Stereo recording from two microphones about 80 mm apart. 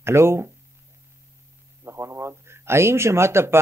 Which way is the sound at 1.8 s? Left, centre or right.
Right.